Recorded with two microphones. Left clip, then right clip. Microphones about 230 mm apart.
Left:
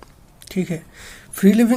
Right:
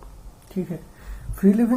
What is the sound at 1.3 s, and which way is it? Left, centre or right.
Speech, left.